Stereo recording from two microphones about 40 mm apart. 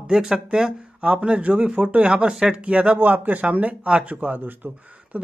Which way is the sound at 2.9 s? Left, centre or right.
Right.